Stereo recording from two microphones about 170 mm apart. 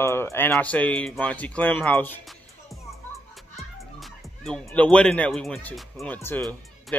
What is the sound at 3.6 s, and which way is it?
Music, centre (ahead or behind).